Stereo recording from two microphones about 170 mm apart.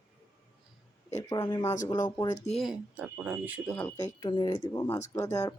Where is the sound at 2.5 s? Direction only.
Centre (ahead or behind).